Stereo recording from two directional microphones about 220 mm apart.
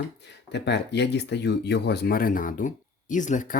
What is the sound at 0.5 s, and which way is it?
Speech, 50° left (ahead or behind).